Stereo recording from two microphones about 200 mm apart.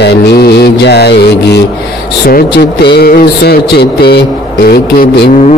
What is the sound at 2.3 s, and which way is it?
Mantra, 55° left (ahead or behind).